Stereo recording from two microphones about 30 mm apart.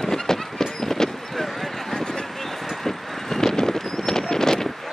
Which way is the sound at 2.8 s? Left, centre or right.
Centre.